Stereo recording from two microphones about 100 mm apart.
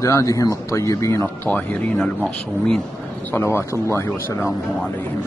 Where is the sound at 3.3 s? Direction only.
25° left (ahead or behind).